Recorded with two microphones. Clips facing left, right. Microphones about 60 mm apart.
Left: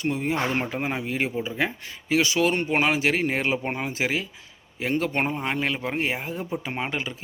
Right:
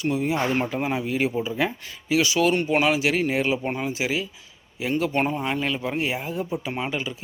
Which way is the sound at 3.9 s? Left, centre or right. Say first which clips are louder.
Even; left.